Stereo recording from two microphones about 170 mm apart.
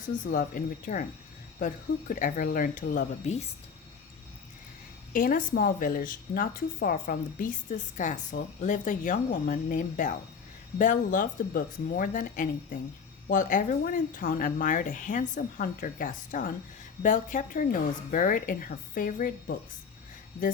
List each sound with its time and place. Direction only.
0.0 s speech: 50° left (ahead or behind)
5.1 s speech: 55° left (ahead or behind)